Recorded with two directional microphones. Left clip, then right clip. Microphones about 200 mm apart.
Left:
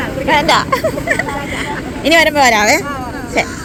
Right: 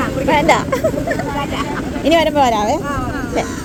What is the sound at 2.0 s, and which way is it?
Speech, 5° right (ahead or behind).